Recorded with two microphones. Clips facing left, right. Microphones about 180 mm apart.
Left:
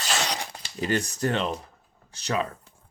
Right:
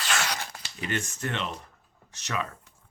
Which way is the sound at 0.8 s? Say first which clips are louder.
Left 6 dB; 35° left (ahead or behind).